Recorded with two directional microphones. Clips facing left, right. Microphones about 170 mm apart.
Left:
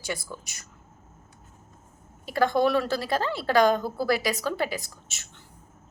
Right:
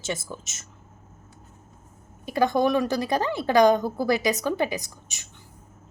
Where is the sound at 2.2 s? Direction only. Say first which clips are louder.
Right 1 dB; 20° right (ahead or behind).